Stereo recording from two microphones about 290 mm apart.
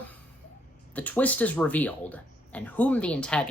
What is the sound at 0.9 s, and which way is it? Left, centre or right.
Speech, centre.